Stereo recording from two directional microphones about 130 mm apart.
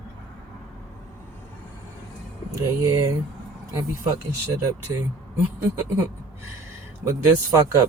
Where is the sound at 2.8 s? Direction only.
25° right (ahead or behind).